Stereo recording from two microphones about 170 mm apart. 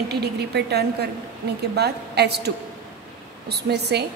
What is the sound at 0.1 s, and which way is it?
A woman's voice, 75° right (ahead or behind).